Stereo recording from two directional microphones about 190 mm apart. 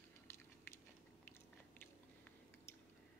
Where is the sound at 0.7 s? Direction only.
10° left (ahead or behind).